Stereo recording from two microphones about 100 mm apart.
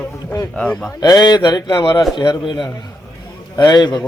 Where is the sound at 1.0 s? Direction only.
45° left (ahead or behind).